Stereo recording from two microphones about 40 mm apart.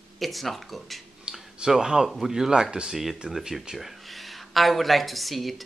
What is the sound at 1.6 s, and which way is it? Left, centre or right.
Speech, centre.